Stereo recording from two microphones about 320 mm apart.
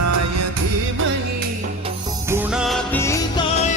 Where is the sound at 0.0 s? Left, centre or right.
Right.